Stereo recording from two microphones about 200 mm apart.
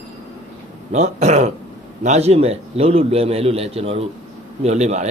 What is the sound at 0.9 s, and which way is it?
A man's voice, 35° right (ahead or behind).